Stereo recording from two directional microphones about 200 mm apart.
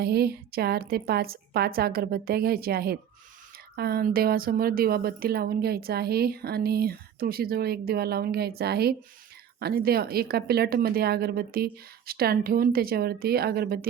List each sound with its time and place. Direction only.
0.0 s a woman's voice: 50° right (ahead or behind)